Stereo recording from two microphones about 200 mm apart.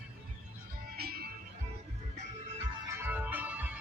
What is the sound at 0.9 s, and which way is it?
Music, 50° right (ahead or behind).